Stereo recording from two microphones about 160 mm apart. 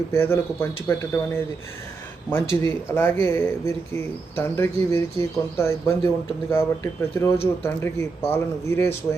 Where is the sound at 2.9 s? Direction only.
15° left (ahead or behind).